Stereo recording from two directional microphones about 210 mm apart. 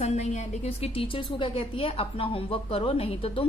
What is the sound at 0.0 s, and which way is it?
A woman's voice, 30° left (ahead or behind).